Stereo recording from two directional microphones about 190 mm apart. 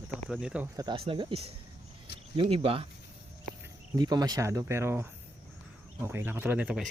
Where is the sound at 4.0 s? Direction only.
20° right (ahead or behind).